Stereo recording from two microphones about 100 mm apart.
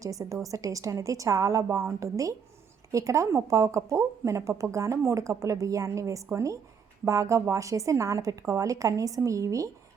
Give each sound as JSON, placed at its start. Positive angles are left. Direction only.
{"t": 0.0, "sound": "speech", "side_deg": -35}